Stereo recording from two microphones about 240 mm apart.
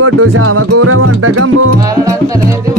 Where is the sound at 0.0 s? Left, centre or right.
Right.